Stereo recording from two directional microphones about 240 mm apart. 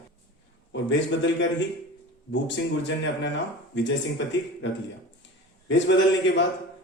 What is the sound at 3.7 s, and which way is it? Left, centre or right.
Speech, left.